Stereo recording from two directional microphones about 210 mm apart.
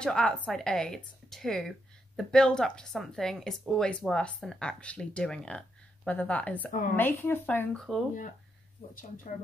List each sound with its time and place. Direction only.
0.0 s speech: 5° left (ahead or behind)
8.9 s speech: 40° left (ahead or behind)